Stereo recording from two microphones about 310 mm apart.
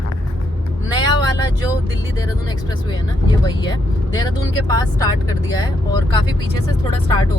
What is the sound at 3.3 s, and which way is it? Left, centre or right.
Speech, centre.